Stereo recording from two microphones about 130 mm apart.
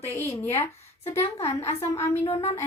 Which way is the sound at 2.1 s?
55° left (ahead or behind).